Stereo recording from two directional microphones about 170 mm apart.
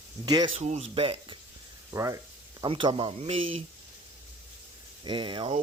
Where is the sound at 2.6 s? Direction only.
30° right (ahead or behind).